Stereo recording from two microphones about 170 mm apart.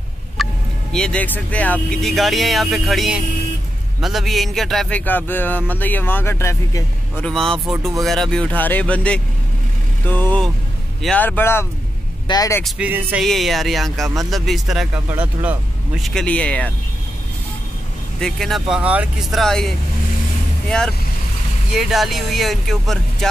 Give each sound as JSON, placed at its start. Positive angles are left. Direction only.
{"t": 0.4, "sound": "vehicle", "side_deg": 0}
{"t": 0.9, "sound": "speech", "side_deg": 5}
{"t": 7.2, "sound": "speech", "side_deg": 5}
{"t": 12.6, "sound": "speech", "side_deg": -5}
{"t": 15.0, "sound": "speech", "side_deg": -10}
{"t": 16.0, "sound": "speech", "side_deg": 5}
{"t": 18.2, "sound": "speech", "side_deg": 0}